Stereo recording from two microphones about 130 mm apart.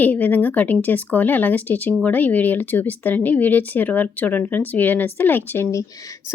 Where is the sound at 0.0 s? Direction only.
10° left (ahead or behind).